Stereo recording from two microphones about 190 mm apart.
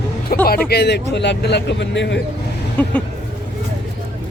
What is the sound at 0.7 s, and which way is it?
A man's voice, 60° left (ahead or behind).